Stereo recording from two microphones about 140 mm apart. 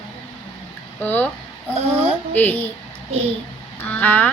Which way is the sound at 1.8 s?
45° right (ahead or behind).